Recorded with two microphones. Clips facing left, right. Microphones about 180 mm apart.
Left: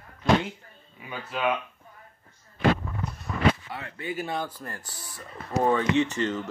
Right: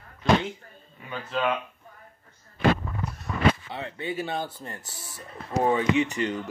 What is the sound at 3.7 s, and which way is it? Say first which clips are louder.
A man's voice: right 2 dB; 20° right (ahead or behind).